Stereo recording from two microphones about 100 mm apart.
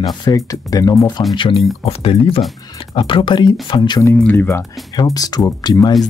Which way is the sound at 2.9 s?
55° left (ahead or behind).